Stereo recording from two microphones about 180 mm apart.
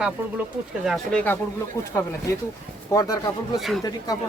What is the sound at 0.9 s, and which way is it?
Speech, 5° left (ahead or behind).